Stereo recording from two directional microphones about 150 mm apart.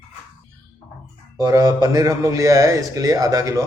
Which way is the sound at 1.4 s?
25° right (ahead or behind).